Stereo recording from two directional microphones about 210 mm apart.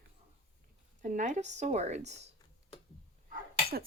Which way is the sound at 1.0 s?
35° right (ahead or behind).